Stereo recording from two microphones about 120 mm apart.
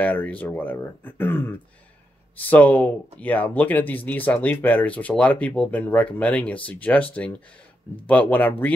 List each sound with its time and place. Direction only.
0.0 s speech: 15° left (ahead or behind)